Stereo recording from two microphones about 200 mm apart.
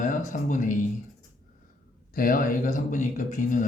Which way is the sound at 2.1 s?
45° left (ahead or behind).